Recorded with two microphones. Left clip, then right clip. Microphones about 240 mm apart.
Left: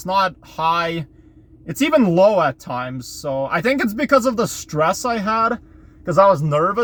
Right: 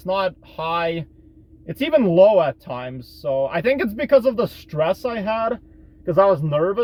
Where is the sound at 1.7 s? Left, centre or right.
Centre.